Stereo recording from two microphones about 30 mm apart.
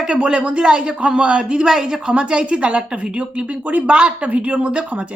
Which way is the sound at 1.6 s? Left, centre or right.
Centre.